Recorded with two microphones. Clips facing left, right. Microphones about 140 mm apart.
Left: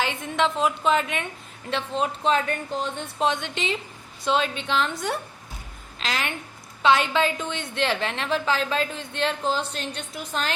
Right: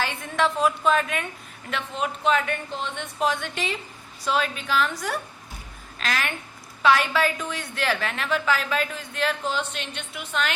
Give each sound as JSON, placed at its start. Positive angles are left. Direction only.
{"t": 0.0, "sound": "a woman's voice", "side_deg": 20}
{"t": 3.2, "sound": "a woman's voice", "side_deg": 20}